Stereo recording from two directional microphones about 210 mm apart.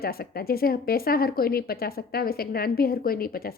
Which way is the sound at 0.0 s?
45° left (ahead or behind).